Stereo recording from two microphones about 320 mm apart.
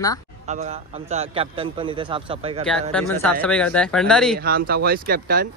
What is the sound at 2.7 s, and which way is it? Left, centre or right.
A man's voice, centre.